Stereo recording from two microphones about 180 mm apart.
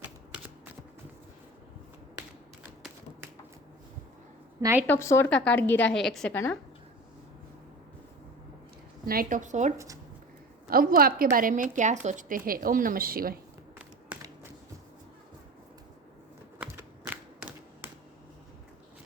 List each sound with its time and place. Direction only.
0.0 s shuffling cards: 10° right (ahead or behind)
4.6 s a woman's voice: 10° right (ahead or behind)
4.9 s a woman's voice: 15° left (ahead or behind)
9.0 s a woman's voice: 50° right (ahead or behind)
9.7 s speech: 20° right (ahead or behind)
10.7 s a woman's voice: 55° right (ahead or behind)
17.1 s a sound: 10° right (ahead or behind)